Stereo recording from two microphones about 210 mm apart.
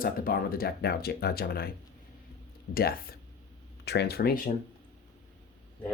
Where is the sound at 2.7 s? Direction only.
45° left (ahead or behind).